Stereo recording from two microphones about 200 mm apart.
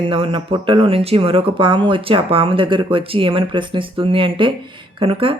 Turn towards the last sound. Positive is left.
turn(degrees=-25)  # may be behind; listen again after turning